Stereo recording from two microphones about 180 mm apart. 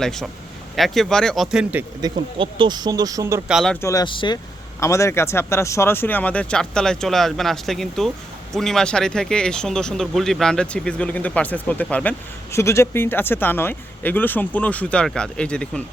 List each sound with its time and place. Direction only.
0.0 s speech: centre (ahead or behind)
2.0 s speech: 25° right (ahead or behind)
3.5 s speech: centre (ahead or behind)
3.8 s speech: 20° left (ahead or behind)
4.8 s speech: 15° left (ahead or behind)